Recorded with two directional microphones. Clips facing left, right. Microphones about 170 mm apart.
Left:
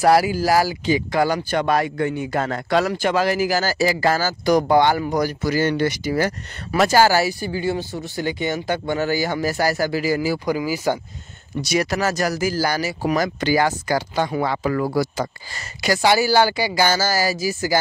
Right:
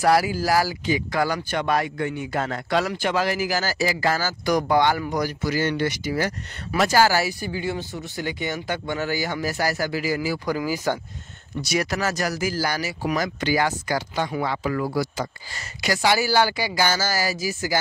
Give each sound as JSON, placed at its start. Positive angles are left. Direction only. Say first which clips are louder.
{"t": 0.0, "sound": "speech", "louder": "left 4 dB", "side_deg": 25}
{"t": 1.6, "sound": "speech", "louder": "left 3 dB", "side_deg": 40}
{"t": 6.9, "sound": "speech", "louder": "left 3 dB", "side_deg": 30}
{"t": 10.4, "sound": "speech", "louder": "left 3 dB", "side_deg": 10}
{"t": 11.6, "sound": "speech", "louder": "left 4 dB", "side_deg": 25}